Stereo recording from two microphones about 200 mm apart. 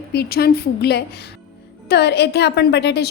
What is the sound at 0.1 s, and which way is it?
A woman's voice, 50° left (ahead or behind).